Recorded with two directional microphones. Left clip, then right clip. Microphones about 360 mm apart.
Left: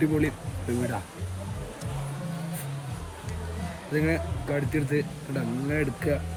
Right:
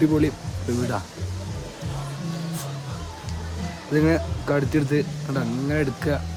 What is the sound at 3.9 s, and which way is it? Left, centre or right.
Speech, centre.